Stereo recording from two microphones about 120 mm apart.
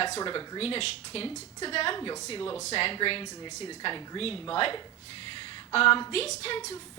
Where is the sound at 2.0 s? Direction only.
30° left (ahead or behind).